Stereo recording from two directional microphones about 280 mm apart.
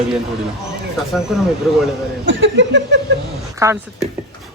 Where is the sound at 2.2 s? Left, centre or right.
Right.